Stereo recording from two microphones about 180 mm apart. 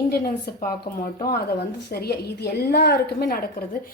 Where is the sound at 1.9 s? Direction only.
60° left (ahead or behind).